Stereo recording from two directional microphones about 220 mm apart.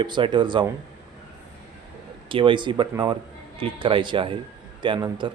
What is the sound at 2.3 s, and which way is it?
Speech, 20° right (ahead or behind).